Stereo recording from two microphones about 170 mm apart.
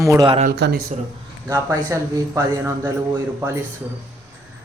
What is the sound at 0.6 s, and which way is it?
Speech, 75° right (ahead or behind).